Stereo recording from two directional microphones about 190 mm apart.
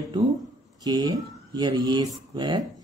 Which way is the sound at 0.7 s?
20° right (ahead or behind).